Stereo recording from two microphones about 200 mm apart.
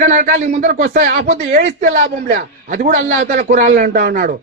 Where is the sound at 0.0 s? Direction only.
40° right (ahead or behind).